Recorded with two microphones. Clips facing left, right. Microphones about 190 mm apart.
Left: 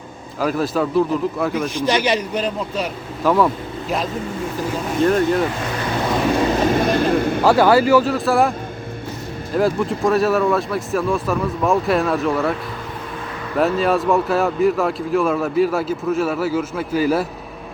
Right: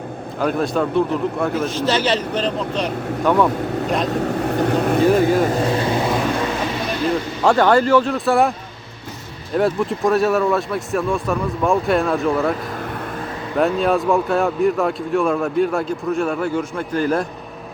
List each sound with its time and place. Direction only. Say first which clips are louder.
0.3 s speech: even; centre (ahead or behind)
1.7 s speech: even; 15° left (ahead or behind)
4.1 s speech: right 5 dB; 70° right (ahead or behind)
5.5 s speech: right 6 dB; 35° right (ahead or behind)
6.6 s vehicle: left 6 dB; 50° left (ahead or behind)
7.4 s speech: even; 5° left (ahead or behind)
9.6 s speech: even; centre (ahead or behind)
13.6 s speech: even; centre (ahead or behind)